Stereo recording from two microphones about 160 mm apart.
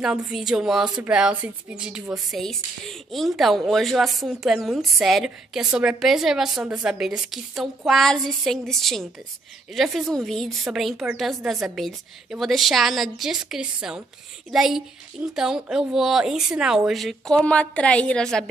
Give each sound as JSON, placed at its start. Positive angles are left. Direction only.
{"t": 0.0, "sound": "a woman's voice", "side_deg": -5}